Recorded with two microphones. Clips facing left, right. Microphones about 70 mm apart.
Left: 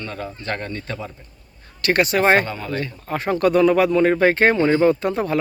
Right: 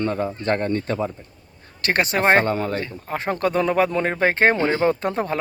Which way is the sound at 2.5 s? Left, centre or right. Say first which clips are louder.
Right 7 dB; right.